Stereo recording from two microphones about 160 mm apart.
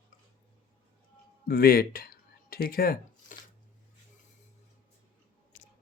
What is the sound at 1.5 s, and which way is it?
Speech, 65° left (ahead or behind).